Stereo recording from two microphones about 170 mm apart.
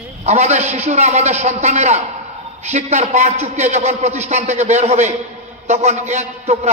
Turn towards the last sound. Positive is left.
turn(degrees=-40)  # may be behind; listen again after turning